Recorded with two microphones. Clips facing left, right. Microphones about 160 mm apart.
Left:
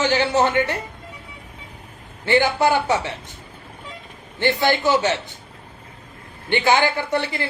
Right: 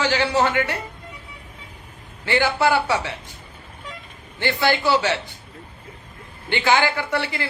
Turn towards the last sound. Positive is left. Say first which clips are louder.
# left 2 dB
turn(degrees=20)  # may be behind; listen again after turning